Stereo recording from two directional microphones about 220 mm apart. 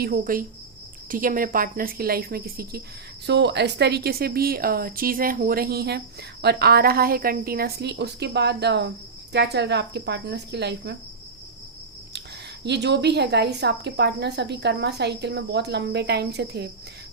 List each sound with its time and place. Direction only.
0.0 s a woman's voice: 40° right (ahead or behind)
12.6 s a woman's voice: 50° right (ahead or behind)